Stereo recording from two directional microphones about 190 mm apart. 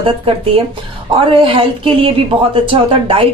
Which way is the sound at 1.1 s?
30° right (ahead or behind).